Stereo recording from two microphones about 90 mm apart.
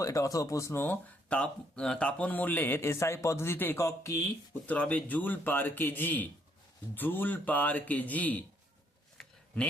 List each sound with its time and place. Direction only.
0.0 s speech: 40° left (ahead or behind)
1.3 s speech: 10° left (ahead or behind); by 4.2 s 35° left (ahead or behind)
4.6 s speech: 15° left (ahead or behind)